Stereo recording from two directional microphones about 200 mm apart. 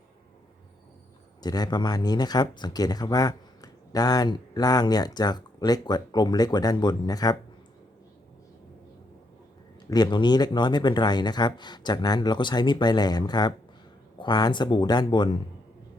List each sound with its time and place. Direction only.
1.4 s speech: 20° left (ahead or behind)
9.9 s speech: 20° left (ahead or behind)